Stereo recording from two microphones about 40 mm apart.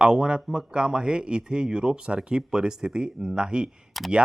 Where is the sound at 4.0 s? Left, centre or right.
Centre.